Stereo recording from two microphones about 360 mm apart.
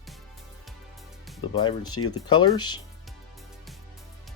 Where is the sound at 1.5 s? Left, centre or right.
Centre.